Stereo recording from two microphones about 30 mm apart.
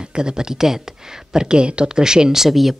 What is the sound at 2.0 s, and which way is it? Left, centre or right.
Speech, right.